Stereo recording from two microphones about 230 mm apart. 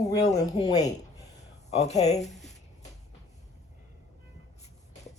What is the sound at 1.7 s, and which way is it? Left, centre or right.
Speech, left.